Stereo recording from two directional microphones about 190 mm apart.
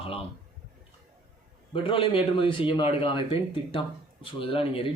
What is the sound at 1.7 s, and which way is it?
A man's voice, 30° left (ahead or behind).